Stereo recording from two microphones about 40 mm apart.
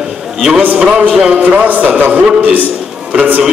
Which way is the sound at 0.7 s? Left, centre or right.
Right.